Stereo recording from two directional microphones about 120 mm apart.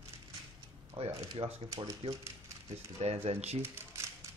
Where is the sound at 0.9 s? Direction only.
55° right (ahead or behind).